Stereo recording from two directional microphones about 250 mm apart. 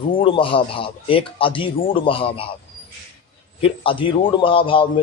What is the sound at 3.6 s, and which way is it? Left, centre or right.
A man's voice, left.